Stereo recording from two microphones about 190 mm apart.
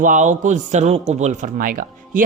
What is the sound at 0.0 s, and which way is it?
A man's voice, 40° right (ahead or behind).